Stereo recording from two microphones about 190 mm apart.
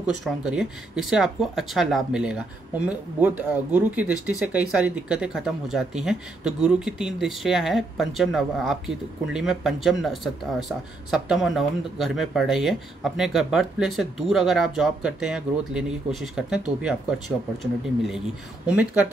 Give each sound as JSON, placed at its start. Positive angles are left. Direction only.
{"t": 0.0, "sound": "speech", "side_deg": -5}